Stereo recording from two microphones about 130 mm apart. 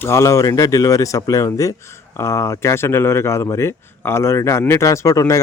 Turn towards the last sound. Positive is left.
turn(degrees=25)  # may be behind; listen again after turning